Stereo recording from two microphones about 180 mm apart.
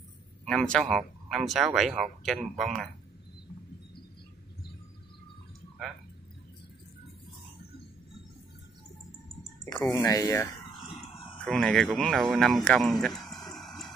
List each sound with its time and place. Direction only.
0.5 s speech: 5° left (ahead or behind)
9.9 s speech: 20° left (ahead or behind)
11.4 s speech: 5° left (ahead or behind)